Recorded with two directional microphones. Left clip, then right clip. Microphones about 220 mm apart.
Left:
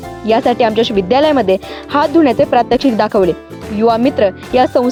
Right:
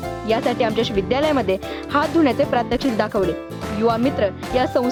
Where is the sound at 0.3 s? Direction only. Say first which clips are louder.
Left 8 dB; 20° left (ahead or behind).